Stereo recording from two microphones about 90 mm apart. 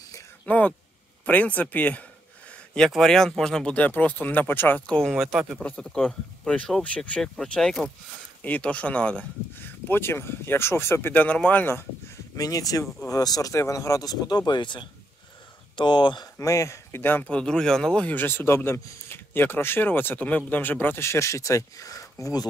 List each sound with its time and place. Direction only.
0.5 s speech: 15° left (ahead or behind)
2.9 s speech: 5° left (ahead or behind); by 4.8 s 20° left (ahead or behind)
4.8 s speech: 5° left (ahead or behind)
5.6 s speech: 10° left (ahead or behind)
9.8 s speech: 25° left (ahead or behind)
12.4 s speech: 40° left (ahead or behind); by 16.3 s 60° left (ahead or behind)
16.3 s speech: 35° left (ahead or behind); by 18.0 s 5° left (ahead or behind)
18.0 s speech: 20° left (ahead or behind); by 22.5 s 45° left (ahead or behind)